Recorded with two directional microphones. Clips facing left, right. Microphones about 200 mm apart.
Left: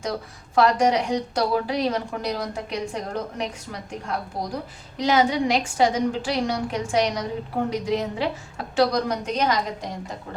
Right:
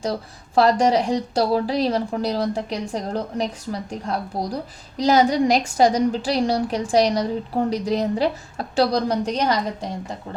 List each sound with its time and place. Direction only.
0.0 s speech: 35° right (ahead or behind)